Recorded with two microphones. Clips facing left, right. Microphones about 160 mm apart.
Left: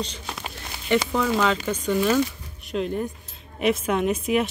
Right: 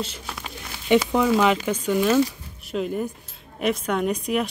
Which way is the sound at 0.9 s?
15° right (ahead or behind).